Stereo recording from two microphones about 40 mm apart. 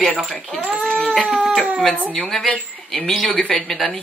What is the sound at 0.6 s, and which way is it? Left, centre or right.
Speech, right.